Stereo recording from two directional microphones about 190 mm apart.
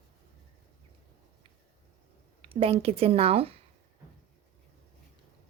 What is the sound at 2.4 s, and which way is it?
A woman's voice, 30° right (ahead or behind).